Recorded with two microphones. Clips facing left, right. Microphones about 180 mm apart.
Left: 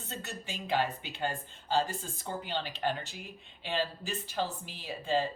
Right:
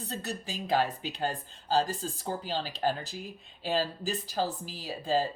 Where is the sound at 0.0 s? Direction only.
35° right (ahead or behind).